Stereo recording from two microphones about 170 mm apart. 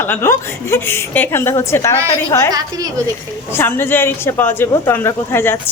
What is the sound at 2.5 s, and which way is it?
Speech, 20° right (ahead or behind).